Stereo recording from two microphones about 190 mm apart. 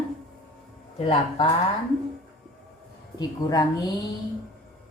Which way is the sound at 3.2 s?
20° left (ahead or behind).